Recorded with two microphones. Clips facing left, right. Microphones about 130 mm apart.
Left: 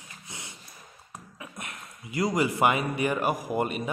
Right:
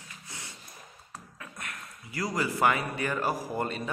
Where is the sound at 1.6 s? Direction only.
20° left (ahead or behind).